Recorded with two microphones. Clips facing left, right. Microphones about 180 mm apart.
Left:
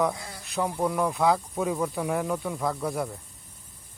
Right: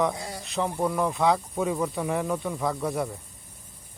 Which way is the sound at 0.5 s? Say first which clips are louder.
Even; centre (ahead or behind).